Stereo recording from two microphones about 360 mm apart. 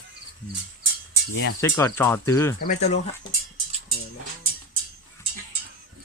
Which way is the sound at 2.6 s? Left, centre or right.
Centre.